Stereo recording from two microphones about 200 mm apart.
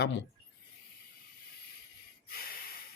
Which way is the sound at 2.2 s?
50° left (ahead or behind).